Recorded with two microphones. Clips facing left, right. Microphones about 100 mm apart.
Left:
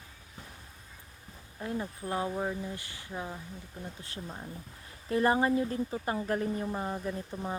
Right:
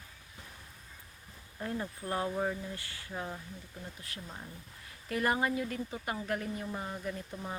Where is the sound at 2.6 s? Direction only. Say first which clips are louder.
Left 2 dB; 20° left (ahead or behind).